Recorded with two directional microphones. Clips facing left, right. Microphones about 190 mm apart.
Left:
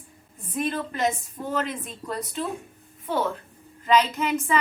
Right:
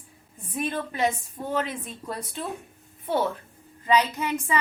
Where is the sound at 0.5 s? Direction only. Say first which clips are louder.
Left 2 dB; 10° right (ahead or behind).